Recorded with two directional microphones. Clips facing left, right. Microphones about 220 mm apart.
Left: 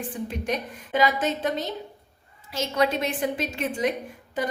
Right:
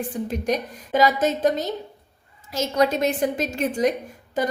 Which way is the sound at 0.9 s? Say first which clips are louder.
Right 4 dB; 40° right (ahead or behind).